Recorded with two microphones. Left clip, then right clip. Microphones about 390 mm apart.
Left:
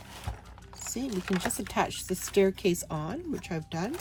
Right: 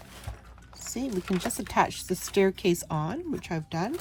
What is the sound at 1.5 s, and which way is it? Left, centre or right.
Speech, centre.